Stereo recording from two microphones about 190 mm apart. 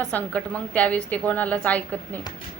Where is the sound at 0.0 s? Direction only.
5° left (ahead or behind).